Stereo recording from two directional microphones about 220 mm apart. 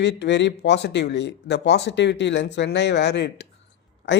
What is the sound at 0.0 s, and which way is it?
Speech, 50° left (ahead or behind).